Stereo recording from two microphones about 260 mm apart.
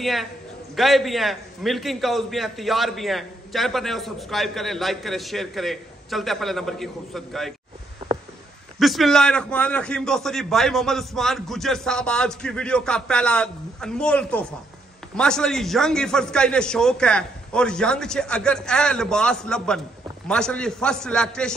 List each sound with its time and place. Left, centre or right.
0.0 s a man's voice: centre
8.0 s a sound: right
8.7 s a man's voice: centre